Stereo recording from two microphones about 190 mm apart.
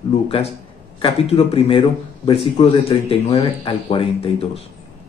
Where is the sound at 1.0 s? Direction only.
30° left (ahead or behind).